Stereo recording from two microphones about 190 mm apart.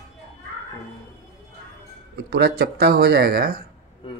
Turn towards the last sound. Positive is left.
turn(degrees=-50)  # may be behind; listen again after turning